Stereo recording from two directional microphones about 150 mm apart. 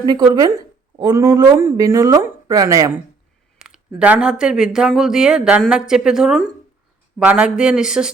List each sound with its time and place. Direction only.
0.0 s speech: 25° right (ahead or behind)
3.6 s speech: 5° right (ahead or behind)